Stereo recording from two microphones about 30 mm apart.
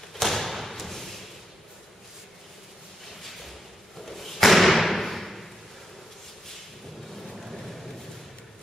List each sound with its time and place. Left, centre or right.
0.1 s thump: centre
4.1 s thump: centre
7.3 s vehicle: centre